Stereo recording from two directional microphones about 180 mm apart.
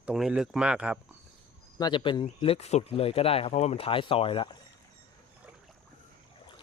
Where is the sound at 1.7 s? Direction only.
25° left (ahead or behind).